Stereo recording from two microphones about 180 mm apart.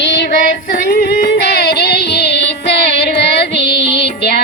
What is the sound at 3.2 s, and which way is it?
Carnatic music, 70° left (ahead or behind).